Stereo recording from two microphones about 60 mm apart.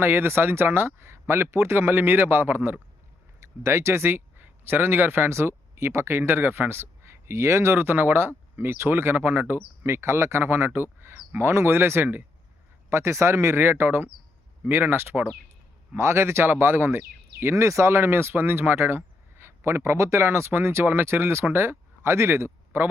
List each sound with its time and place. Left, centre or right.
0.0 s speech: right
3.4 s speech: right
9.8 s speech: right
12.9 s speech: right
16.0 s speech: right
17.4 s speech: right